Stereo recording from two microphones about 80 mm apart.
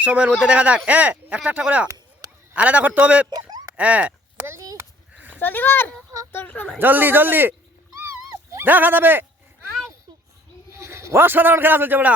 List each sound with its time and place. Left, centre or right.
0.0 s speech: centre
4.4 s a sound: right
5.1 s goat: centre
5.4 s speech: left
6.7 s speech: right
7.9 s dog: right
10.7 s a man's voice: right